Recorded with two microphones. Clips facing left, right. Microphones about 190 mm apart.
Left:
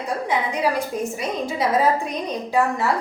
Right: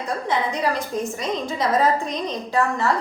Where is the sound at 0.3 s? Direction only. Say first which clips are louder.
Even; 10° left (ahead or behind).